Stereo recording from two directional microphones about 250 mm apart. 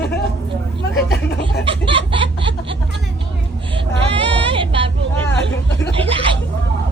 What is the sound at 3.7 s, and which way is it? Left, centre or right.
Child singing, right.